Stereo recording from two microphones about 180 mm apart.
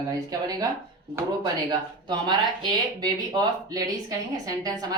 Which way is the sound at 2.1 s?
25° right (ahead or behind).